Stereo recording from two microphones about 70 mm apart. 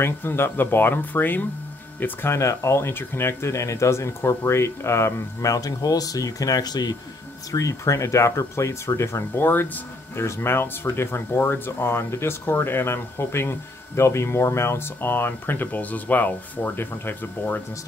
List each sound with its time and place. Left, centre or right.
0.0 s speech: left
2.3 s speech: left
7.5 s speech: left
9.4 s speech: left